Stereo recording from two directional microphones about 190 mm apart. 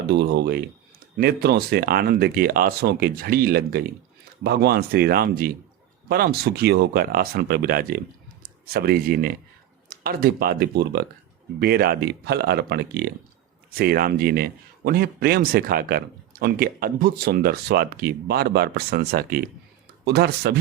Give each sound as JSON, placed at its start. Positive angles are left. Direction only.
{"t": 0.1, "sound": "speech", "side_deg": -60}